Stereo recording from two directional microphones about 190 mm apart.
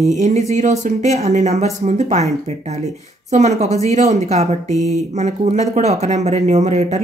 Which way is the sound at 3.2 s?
35° right (ahead or behind).